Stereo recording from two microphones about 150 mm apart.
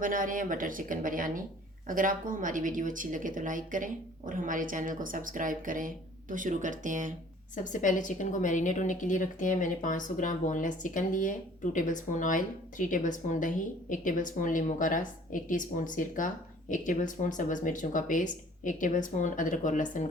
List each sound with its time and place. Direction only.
0.0 s speech: 65° right (ahead or behind)
7.5 s a woman's voice: 60° left (ahead or behind)